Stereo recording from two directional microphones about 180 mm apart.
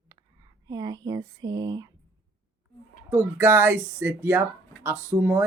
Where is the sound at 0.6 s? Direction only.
20° right (ahead or behind).